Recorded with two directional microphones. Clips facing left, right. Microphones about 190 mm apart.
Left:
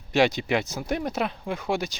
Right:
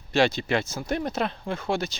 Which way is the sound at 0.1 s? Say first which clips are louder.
Left 1 dB; 15° left (ahead or behind).